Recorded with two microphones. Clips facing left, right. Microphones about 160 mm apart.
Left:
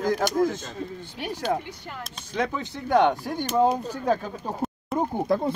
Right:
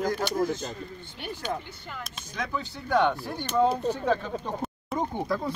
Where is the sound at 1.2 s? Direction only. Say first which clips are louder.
Left 6 dB; 90° left.